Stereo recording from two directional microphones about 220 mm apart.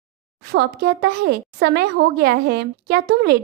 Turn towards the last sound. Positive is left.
turn(degrees=-45)  # may be behind; listen again after turning